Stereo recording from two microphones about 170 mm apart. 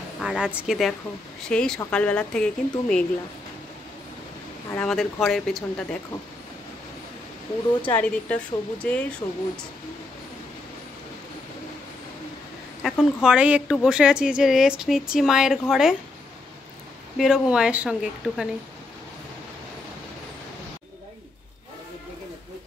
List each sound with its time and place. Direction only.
0.2 s a woman's voice: 5° right (ahead or behind)
4.7 s speech: centre (ahead or behind)
7.9 s a woman's voice: 10° left (ahead or behind)
9.2 s speech: 25° left (ahead or behind)
12.8 s speech: 5° right (ahead or behind)
17.2 s speech: 5° right (ahead or behind)